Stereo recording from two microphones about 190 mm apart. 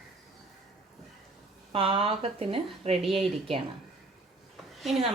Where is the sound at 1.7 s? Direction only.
30° right (ahead or behind).